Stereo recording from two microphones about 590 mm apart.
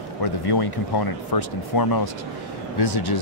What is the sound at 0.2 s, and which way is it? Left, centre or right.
Speech, left.